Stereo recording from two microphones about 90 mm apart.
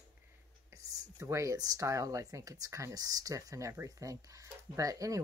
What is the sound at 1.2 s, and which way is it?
A woman's voice, 35° right (ahead or behind).